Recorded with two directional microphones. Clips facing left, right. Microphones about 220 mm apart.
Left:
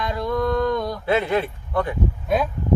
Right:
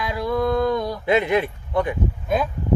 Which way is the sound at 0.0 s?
5° right (ahead or behind).